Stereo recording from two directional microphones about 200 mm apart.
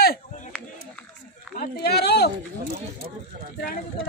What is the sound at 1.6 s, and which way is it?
Speech, 55° left (ahead or behind).